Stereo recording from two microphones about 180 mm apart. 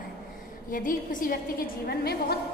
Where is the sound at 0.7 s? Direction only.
50° left (ahead or behind).